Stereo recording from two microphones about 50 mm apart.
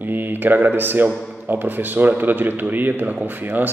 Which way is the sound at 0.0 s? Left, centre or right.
Right.